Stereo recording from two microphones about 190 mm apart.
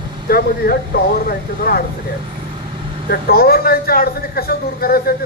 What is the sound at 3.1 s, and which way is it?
A man's voice, 55° left (ahead or behind).